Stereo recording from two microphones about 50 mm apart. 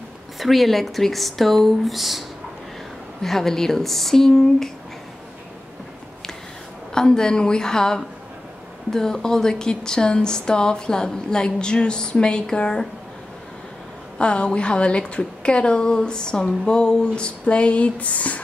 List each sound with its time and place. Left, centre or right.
0.4 s speech: centre
3.2 s speech: centre
6.9 s speech: centre
14.1 s a woman's voice: left